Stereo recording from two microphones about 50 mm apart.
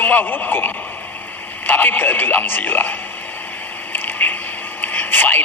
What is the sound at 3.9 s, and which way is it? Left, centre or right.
Water, left.